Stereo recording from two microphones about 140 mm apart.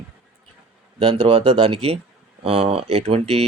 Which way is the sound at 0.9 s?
40° right (ahead or behind).